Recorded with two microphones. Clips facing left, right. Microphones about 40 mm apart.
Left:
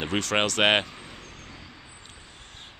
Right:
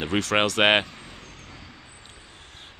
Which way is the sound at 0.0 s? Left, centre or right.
Centre.